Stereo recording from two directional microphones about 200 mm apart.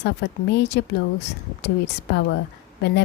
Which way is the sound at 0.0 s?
55° left (ahead or behind).